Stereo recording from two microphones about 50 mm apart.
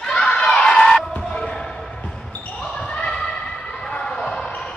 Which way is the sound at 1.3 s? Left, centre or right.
Centre.